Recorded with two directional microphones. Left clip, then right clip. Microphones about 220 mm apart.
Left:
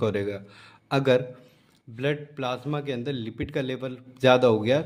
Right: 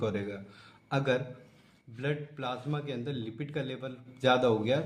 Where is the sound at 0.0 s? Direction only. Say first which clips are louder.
Left 7 dB; 45° left (ahead or behind).